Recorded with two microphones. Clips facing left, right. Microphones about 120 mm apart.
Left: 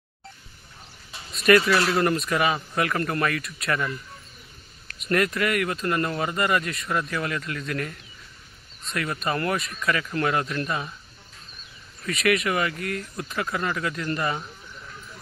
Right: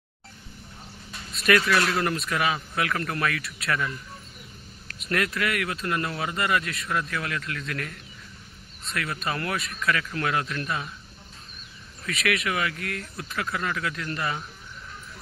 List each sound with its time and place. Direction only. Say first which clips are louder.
1.1 s speech: left 4 dB; centre (ahead or behind)
4.9 s speech: left 4 dB; centre (ahead or behind)
12.1 s speech: left 4 dB; centre (ahead or behind)